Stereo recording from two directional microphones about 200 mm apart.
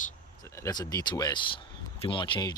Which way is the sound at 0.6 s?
20° left (ahead or behind).